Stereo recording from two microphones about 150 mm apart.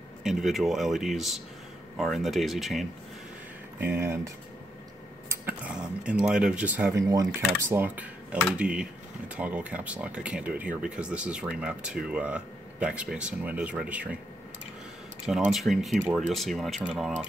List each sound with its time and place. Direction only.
0.2 s speech: centre (ahead or behind)
4.0 s speech: 20° right (ahead or behind)
5.3 s speech: 15° right (ahead or behind)
6.9 s speech: 25° right (ahead or behind)
7.6 s speech: 15° right (ahead or behind)
15.2 s speech: 5° right (ahead or behind)